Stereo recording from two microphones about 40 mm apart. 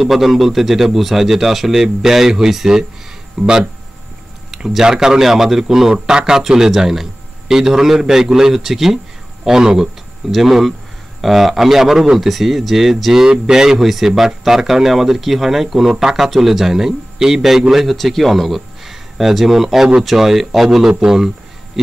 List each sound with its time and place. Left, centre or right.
0.0 s speech: centre
4.6 s speech: centre